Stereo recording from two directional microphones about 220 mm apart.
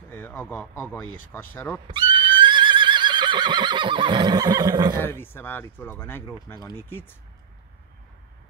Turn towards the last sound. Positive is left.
turn(degrees=15)  # may be behind; listen again after turning